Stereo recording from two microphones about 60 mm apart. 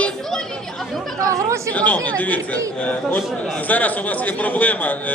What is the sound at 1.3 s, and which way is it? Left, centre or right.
Speech, right.